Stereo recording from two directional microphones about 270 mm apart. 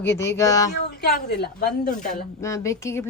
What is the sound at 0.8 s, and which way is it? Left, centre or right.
A woman's voice, left.